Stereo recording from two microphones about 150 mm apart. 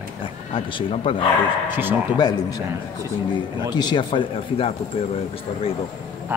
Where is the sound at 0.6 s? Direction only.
35° left (ahead or behind).